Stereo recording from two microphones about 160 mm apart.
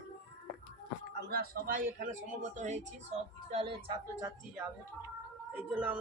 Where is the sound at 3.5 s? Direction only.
35° right (ahead or behind).